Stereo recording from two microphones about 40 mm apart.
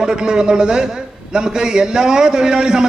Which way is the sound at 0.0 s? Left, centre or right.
Centre.